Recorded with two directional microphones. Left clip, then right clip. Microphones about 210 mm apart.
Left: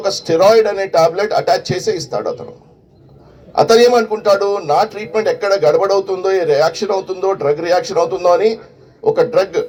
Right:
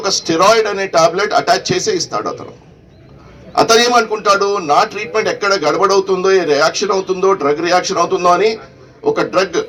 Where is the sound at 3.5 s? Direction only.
50° left (ahead or behind).